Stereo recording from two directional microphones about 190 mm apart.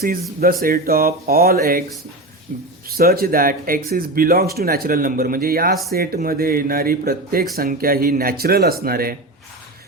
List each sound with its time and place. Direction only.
0.0 s speech: 50° right (ahead or behind)